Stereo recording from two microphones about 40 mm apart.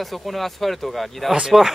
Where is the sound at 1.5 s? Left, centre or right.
Centre.